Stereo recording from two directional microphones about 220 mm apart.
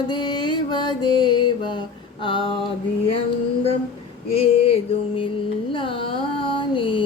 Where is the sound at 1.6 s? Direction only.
20° left (ahead or behind).